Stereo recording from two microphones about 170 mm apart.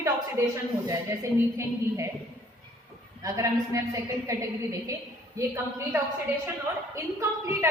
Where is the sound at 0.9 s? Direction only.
15° right (ahead or behind).